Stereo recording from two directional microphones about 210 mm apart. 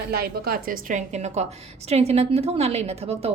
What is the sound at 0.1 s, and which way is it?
A woman's voice, 45° right (ahead or behind).